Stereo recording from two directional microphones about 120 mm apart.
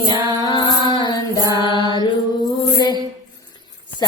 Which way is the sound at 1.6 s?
40° left (ahead or behind).